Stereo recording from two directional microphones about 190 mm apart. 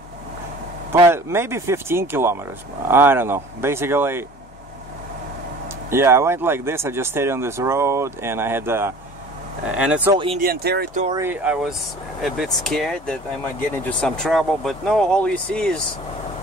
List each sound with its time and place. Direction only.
0.9 s speech: 15° right (ahead or behind)
5.9 s speech: 15° right (ahead or behind)
10.1 s speech: 30° right (ahead or behind)
10.4 s speech: 55° right (ahead or behind)
11.1 s speech: 10° right (ahead or behind)